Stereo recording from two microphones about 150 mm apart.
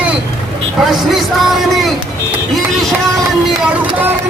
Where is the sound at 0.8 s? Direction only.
Centre (ahead or behind).